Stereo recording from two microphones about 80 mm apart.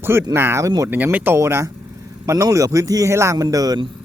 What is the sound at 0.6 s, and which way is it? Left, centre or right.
Speech, right.